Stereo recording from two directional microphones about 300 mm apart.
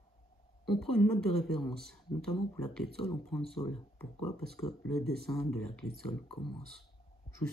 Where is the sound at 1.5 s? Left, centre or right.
Centre.